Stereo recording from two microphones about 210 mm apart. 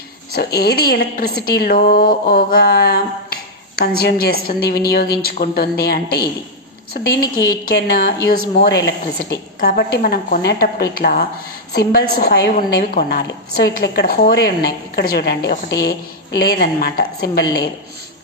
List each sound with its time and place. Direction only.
0.3 s a woman's voice: 50° left (ahead or behind)